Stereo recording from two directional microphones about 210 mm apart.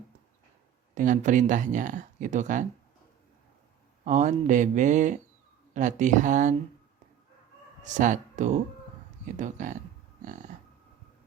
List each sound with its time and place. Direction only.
0.9 s speech: 35° right (ahead or behind)
4.0 s speech: 35° right (ahead or behind)
7.9 s speech: 35° right (ahead or behind)